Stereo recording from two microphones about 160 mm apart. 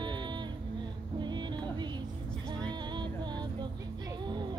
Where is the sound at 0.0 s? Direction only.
30° right (ahead or behind).